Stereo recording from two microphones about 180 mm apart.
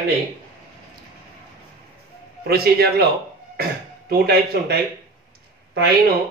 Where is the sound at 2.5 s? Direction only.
60° right (ahead or behind).